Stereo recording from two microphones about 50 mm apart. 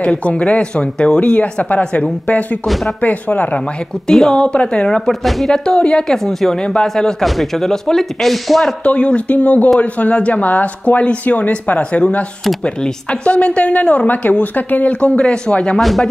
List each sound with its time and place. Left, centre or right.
0.0 s speech: left
2.6 s speech: centre
3.0 s speech: left
4.1 s speech: centre
4.8 s speech: centre
5.5 s speech: centre
6.1 s speech: centre
8.8 s speech: left
15.8 s speech: centre